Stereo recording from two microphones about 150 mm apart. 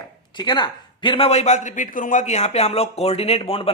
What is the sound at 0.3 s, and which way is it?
A man's voice, 30° left (ahead or behind).